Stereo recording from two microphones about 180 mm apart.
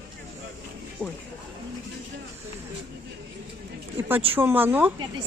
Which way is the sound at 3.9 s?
10° right (ahead or behind).